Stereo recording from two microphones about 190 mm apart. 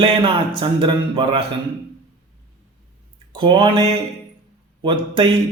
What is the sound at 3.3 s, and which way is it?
Speech, 25° right (ahead or behind).